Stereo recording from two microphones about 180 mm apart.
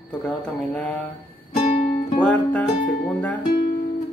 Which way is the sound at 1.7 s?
35° left (ahead or behind).